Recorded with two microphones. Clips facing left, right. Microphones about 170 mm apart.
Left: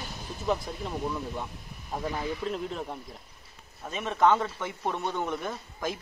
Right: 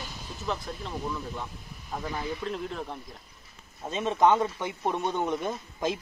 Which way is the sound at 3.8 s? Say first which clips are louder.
Right 1 dB; 20° right (ahead or behind).